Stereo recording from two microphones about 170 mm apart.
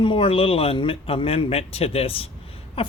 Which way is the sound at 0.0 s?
30° left (ahead or behind).